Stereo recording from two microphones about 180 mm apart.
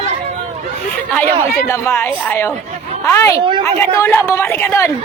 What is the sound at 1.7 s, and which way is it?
Speech, 15° left (ahead or behind).